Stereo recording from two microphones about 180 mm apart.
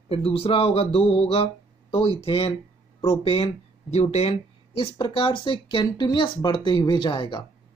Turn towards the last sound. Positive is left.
turn(degrees=25)  # may be behind; listen again after turning